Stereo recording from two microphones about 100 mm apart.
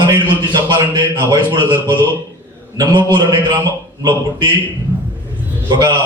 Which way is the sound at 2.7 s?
45° right (ahead or behind).